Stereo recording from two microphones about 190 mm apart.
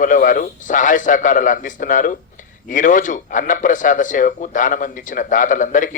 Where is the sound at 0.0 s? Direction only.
45° left (ahead or behind).